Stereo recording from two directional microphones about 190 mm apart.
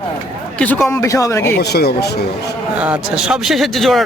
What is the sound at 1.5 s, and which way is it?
Speech, 60° left (ahead or behind).